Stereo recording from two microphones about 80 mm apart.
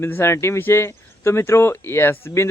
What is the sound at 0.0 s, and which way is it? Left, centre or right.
Speech, left.